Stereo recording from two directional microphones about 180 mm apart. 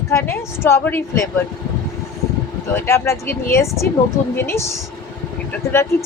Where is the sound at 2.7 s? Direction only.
10° left (ahead or behind).